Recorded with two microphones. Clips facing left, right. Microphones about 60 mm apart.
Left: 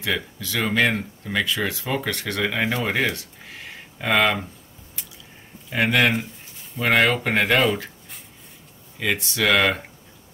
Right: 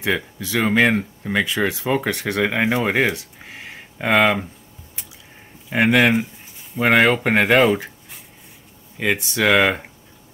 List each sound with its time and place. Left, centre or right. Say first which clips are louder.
0.0 s speech: right 4 dB; centre
4.1 s speech: right 3 dB; centre
5.7 s speech: right 5 dB; right
5.9 s speech: right 4 dB; centre
9.0 s speech: right 3 dB; centre